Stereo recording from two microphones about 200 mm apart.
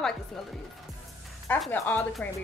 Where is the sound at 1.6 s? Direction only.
10° left (ahead or behind).